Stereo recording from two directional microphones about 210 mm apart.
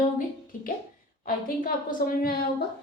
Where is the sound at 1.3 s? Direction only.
40° left (ahead or behind).